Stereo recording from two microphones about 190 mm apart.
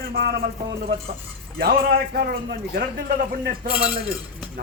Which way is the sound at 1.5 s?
50° right (ahead or behind).